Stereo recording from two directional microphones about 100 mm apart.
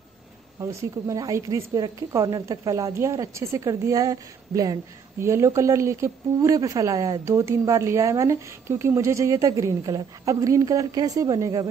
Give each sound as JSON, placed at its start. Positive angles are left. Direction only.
{"t": 0.6, "sound": "speech", "side_deg": -30}